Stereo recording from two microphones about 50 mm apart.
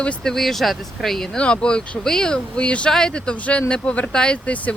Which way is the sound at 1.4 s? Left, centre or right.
Centre.